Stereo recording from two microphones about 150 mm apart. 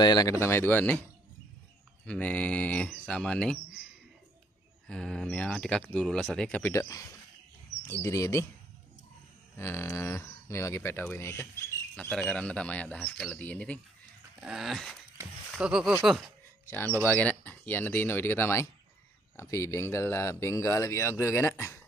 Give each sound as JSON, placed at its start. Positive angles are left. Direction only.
{"t": 0.0, "sound": "speech", "side_deg": 25}
{"t": 2.0, "sound": "speech", "side_deg": 10}
{"t": 4.8, "sound": "speech", "side_deg": 5}
{"t": 6.7, "sound": "speech", "side_deg": 20}
{"t": 9.6, "sound": "speech", "side_deg": 15}
{"t": 14.4, "sound": "speech", "side_deg": 0}
{"t": 16.6, "sound": "speech", "side_deg": 10}